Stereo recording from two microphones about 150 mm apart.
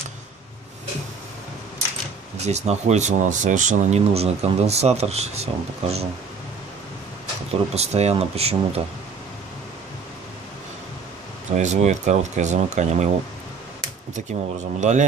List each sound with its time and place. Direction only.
2.4 s speech: 45° right (ahead or behind)
7.7 s speech: 45° right (ahead or behind)
11.5 s speech: 50° right (ahead or behind)
14.8 s speech: 55° right (ahead or behind)